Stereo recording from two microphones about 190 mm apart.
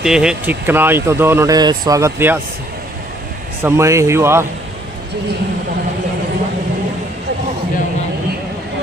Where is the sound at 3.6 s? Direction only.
15° right (ahead or behind).